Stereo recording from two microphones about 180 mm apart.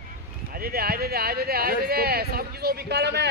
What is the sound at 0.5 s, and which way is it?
Speech, 55° right (ahead or behind).